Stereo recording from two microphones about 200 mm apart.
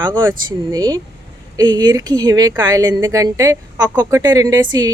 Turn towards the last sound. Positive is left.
turn(degrees=-20)  # may be behind; listen again after turning